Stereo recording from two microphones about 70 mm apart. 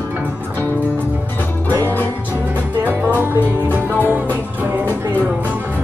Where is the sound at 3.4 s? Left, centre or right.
Left.